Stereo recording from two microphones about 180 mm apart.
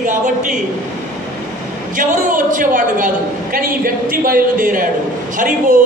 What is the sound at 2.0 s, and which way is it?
A man's voice, 50° right (ahead or behind).